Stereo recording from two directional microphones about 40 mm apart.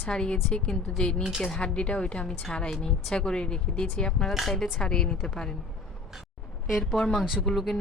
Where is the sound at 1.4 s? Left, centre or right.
Centre.